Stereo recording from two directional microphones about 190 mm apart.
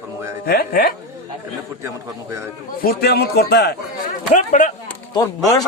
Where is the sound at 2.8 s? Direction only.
55° left (ahead or behind).